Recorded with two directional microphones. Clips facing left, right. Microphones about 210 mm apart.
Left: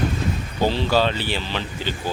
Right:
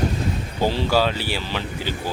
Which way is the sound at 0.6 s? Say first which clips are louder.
Even; 10° right (ahead or behind).